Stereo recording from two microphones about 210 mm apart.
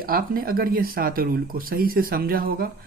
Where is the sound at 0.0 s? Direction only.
45° right (ahead or behind).